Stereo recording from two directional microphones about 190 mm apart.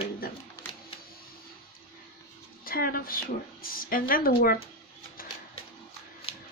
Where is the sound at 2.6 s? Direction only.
50° left (ahead or behind).